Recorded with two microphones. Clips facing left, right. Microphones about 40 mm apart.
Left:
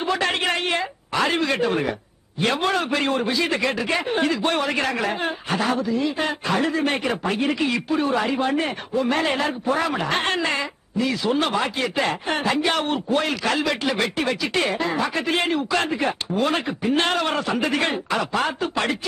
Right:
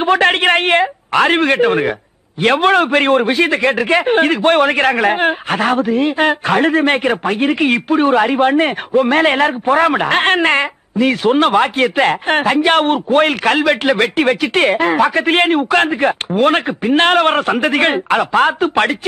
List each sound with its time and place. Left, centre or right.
0.0 s a woman's voice: right